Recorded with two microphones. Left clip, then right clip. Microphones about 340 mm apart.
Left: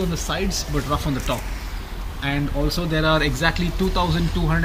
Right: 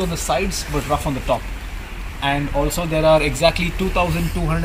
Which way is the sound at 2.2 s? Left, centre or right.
Centre.